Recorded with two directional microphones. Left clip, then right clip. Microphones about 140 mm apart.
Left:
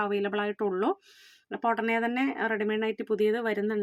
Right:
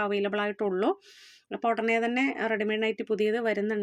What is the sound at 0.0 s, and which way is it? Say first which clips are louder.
Speech: right 1 dB; 15° right (ahead or behind).